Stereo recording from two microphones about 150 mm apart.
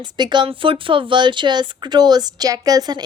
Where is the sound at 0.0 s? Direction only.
30° right (ahead or behind).